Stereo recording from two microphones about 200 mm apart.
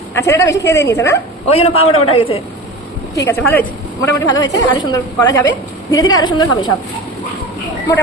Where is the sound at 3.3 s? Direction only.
10° left (ahead or behind).